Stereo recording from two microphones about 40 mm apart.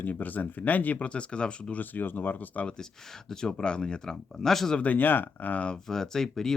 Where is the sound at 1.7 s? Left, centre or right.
Left.